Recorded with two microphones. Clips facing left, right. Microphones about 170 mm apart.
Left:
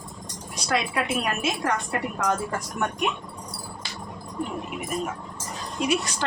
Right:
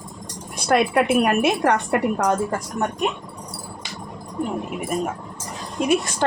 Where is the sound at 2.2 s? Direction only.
35° right (ahead or behind).